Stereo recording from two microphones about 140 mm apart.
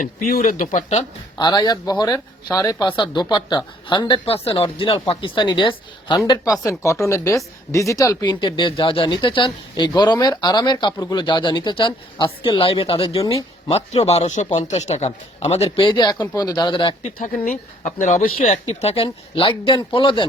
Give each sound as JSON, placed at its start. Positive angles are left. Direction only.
{"t": 0.0, "sound": "speech", "side_deg": 65}
{"t": 1.4, "sound": "a woman's voice", "side_deg": 30}
{"t": 17.0, "sound": "a woman's voice", "side_deg": 70}